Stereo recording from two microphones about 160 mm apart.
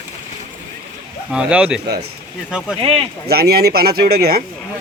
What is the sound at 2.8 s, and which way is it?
Speech, 35° right (ahead or behind).